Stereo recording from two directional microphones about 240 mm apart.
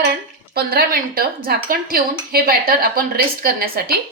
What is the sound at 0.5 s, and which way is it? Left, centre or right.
Speech, right.